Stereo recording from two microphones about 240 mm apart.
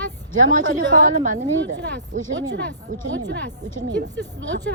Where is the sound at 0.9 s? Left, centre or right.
Right.